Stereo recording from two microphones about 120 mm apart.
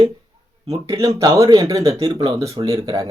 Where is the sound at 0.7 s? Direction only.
30° right (ahead or behind).